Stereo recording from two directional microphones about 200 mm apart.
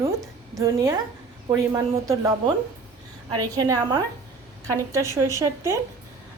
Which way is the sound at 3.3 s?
15° right (ahead or behind).